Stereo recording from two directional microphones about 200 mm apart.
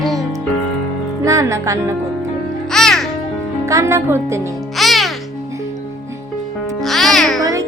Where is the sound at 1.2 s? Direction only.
15° right (ahead or behind).